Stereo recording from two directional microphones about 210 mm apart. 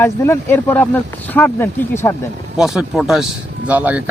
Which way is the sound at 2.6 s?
Centre (ahead or behind).